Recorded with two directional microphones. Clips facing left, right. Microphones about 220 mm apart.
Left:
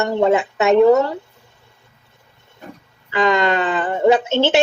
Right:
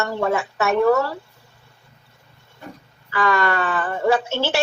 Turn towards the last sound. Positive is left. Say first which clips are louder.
# left 6 dB
turn(degrees=20)  # may be behind; listen again after turning